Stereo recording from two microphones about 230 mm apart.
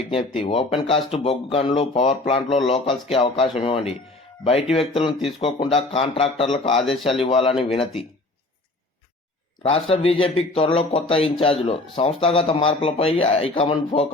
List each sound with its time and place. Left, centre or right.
0.3 s speech: left
9.6 s speech: left